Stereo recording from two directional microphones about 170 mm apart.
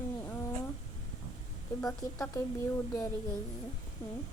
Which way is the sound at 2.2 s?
15° left (ahead or behind).